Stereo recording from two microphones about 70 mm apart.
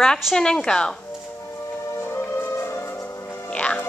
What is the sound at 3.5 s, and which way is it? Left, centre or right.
Music, centre.